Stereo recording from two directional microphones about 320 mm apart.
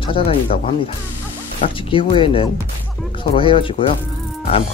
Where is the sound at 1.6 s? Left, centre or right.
Centre.